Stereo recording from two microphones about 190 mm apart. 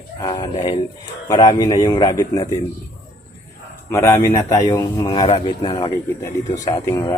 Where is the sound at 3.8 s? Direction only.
15° left (ahead or behind).